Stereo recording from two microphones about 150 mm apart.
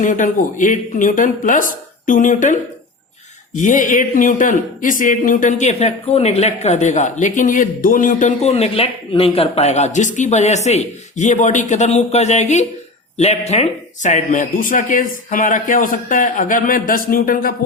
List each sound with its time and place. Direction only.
0.0 s speech: 60° left (ahead or behind)
8.4 s speech: 40° left (ahead or behind); by 17.5 s 70° left (ahead or behind)